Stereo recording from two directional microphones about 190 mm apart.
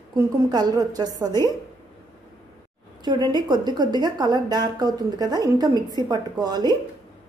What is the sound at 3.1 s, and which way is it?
A woman's voice, 20° right (ahead or behind).